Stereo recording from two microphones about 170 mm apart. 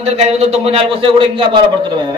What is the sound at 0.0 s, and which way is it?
A man's voice, 40° right (ahead or behind).